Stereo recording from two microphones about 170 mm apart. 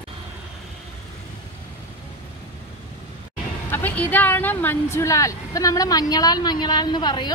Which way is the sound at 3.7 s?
10° left (ahead or behind).